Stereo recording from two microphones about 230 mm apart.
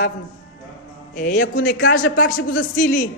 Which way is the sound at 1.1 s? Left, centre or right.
Left.